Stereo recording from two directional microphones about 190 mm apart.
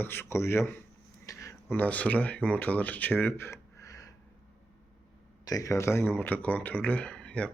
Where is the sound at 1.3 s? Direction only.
15° left (ahead or behind).